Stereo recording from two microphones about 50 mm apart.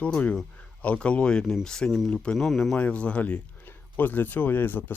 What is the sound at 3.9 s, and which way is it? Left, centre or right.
Speech, left.